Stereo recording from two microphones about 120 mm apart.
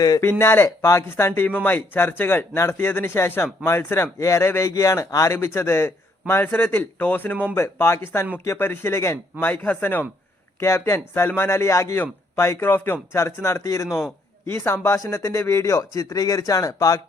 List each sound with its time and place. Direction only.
0.0 s speech: 30° left (ahead or behind)
0.3 s speech: 20° left (ahead or behind)